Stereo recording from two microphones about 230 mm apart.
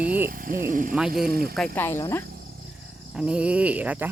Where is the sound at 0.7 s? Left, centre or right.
Right.